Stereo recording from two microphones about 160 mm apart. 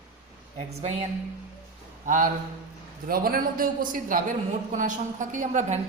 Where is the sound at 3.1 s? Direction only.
65° right (ahead or behind).